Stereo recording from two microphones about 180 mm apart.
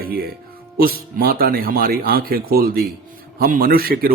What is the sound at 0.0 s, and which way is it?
A man's voice, 55° right (ahead or behind).